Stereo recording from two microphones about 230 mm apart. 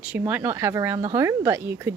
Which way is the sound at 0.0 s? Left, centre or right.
Centre.